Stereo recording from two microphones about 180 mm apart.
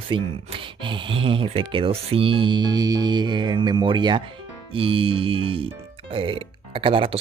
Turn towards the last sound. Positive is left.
turn(degrees=-30)  # may be behind; listen again after turning